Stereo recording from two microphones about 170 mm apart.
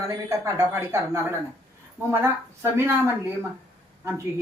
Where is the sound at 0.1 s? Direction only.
15° right (ahead or behind).